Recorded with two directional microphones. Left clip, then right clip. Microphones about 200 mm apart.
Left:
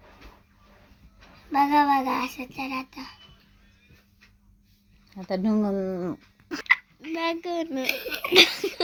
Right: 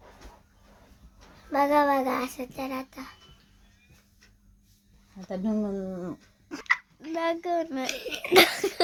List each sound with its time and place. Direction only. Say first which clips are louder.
1.5 s child singing: left 2 dB; 15° right (ahead or behind)
5.3 s speech: left 5 dB; 30° left (ahead or behind)
5.7 s speech: left 6 dB; 40° left (ahead or behind)
6.5 s a sound: left 6 dB; 15° left (ahead or behind)
7.0 s a child's voice: even; 10° right (ahead or behind)
8.3 s a sound: left 1 dB; 20° right (ahead or behind)